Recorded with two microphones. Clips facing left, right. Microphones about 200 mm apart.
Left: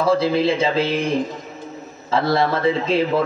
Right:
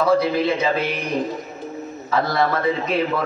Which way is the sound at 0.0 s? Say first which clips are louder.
Left 1 dB; 30° left (ahead or behind).